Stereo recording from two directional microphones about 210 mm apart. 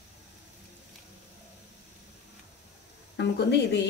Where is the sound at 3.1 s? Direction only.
55° left (ahead or behind).